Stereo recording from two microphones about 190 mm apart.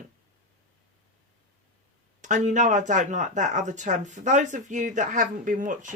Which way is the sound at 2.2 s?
40° right (ahead or behind).